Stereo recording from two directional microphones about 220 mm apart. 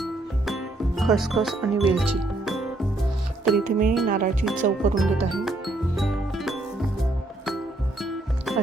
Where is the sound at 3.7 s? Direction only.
40° right (ahead or behind).